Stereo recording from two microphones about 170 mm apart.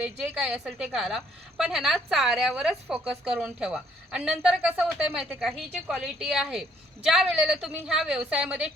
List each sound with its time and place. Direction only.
0.0 s a woman's voice: 5° right (ahead or behind)